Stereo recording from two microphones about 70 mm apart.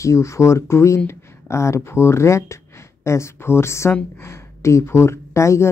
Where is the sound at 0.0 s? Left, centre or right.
Left.